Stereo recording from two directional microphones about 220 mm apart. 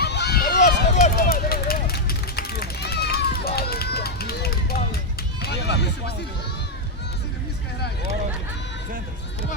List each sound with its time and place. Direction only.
0.0 s run: 50° left (ahead or behind)
5.6 s music: 50° left (ahead or behind)